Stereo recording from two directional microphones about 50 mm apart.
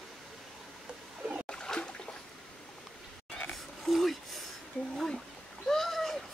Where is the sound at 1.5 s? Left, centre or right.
Centre.